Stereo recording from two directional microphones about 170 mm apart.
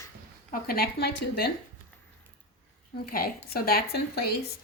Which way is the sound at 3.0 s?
60° left (ahead or behind).